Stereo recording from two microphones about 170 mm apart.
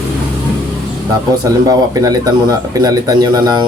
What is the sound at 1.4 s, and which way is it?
Speech, 20° right (ahead or behind).